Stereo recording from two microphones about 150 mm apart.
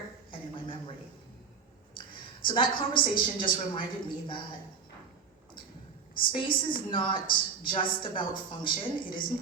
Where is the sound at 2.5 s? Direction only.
35° left (ahead or behind).